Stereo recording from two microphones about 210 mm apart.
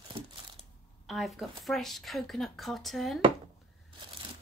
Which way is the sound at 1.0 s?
Centre (ahead or behind).